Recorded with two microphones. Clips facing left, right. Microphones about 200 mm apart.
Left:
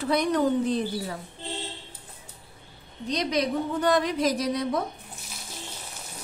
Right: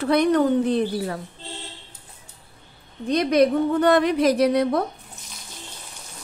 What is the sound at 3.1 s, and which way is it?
A woman's voice, 55° right (ahead or behind).